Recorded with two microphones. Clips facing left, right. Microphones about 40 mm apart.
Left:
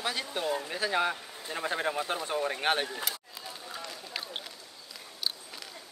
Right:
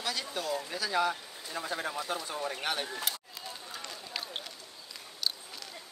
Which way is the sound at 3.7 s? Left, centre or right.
Centre.